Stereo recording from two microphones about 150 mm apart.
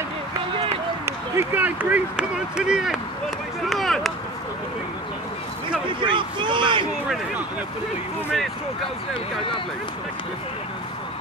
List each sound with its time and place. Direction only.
1.0 s speech: 15° right (ahead or behind)
3.6 s a sound: centre (ahead or behind)
5.9 s speech: 35° right (ahead or behind)